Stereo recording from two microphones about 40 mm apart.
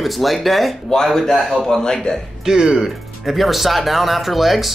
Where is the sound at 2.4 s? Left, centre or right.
Centre.